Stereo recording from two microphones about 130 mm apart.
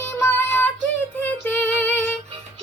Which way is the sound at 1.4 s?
10° left (ahead or behind).